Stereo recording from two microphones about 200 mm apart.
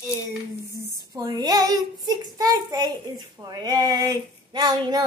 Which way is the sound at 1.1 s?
20° right (ahead or behind).